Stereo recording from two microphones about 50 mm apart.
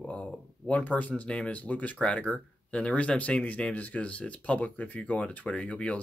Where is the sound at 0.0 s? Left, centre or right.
Left.